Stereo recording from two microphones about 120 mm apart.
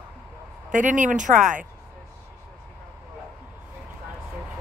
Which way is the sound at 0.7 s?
90° right.